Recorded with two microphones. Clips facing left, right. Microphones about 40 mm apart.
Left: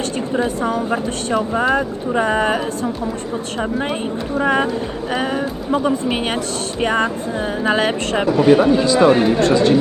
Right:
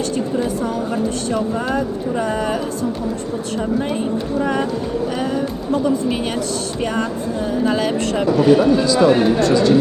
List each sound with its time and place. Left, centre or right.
0.3 s speech: left
4.4 s speech: left